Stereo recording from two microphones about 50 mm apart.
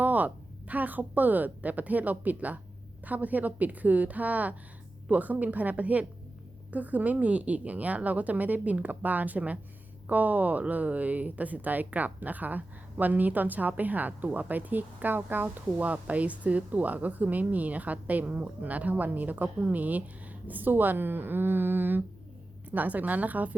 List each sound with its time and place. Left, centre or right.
0.0 s a woman's voice: right
15.4 s a woman's voice: right